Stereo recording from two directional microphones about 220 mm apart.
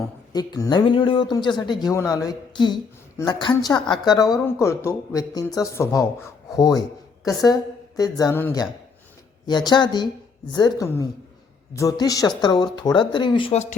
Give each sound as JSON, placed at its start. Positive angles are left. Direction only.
{"t": 0.3, "sound": "a woman's voice", "side_deg": 15}